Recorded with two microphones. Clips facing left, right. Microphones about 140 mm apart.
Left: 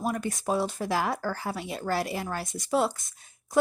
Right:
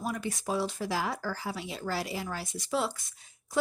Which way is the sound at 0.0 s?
50° left (ahead or behind).